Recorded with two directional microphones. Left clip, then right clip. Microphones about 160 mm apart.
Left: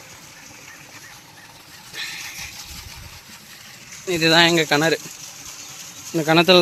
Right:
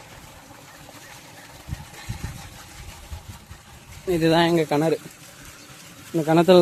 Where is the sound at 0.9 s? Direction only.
55° right (ahead or behind).